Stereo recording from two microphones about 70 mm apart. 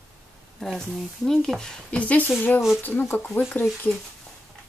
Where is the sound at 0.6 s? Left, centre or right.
Centre; by 3.7 s left.